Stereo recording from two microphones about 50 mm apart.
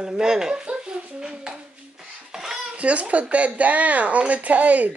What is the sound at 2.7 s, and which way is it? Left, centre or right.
Speech, right.